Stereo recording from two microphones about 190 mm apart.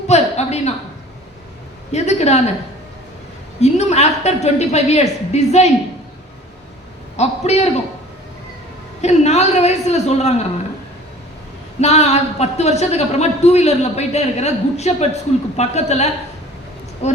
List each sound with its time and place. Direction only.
0.1 s a sound: 35° left (ahead or behind)
1.9 s a woman's voice: 35° left (ahead or behind)
3.6 s a woman's voice: 35° left (ahead or behind)
7.2 s a man's voice: 35° left (ahead or behind)
9.0 s a man's voice: 35° left (ahead or behind)
11.8 s a man's voice: 35° left (ahead or behind)